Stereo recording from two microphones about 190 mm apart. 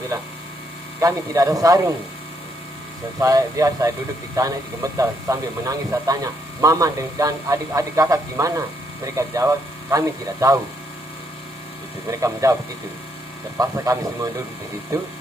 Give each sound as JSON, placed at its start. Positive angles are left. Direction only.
{"t": 0.1, "sound": "speech", "side_deg": -15}
{"t": 3.2, "sound": "speech", "side_deg": -15}
{"t": 12.0, "sound": "speech", "side_deg": -15}
{"t": 13.6, "sound": "speech", "side_deg": -15}